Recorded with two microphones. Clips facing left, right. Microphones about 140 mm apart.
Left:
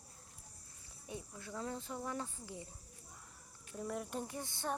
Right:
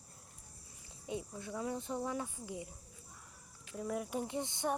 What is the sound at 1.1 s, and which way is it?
Speech, 20° right (ahead or behind).